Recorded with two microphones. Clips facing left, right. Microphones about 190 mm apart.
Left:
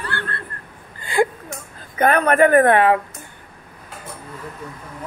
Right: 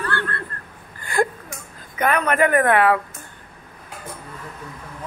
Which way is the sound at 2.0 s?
30° left (ahead or behind).